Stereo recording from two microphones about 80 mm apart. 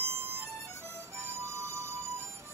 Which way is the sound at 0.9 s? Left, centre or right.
Right.